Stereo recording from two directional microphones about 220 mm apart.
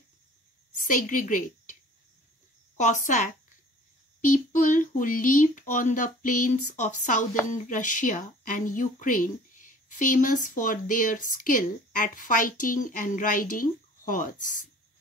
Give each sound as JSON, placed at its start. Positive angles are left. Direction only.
{"t": 0.8, "sound": "a woman's voice", "side_deg": 35}
{"t": 2.8, "sound": "speech", "side_deg": 35}